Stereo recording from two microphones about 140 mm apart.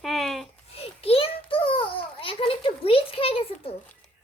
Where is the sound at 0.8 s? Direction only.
45° left (ahead or behind).